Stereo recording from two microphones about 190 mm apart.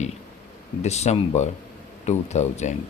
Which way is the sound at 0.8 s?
35° left (ahead or behind).